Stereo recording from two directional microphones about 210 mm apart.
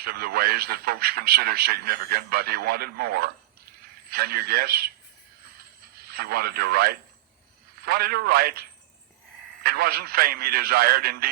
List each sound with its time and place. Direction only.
0.0 s a man's voice: 45° right (ahead or behind)
5.5 s a sound: 45° right (ahead or behind)
7.8 s a man's voice: 45° right (ahead or behind)
9.6 s a man's voice: 45° right (ahead or behind)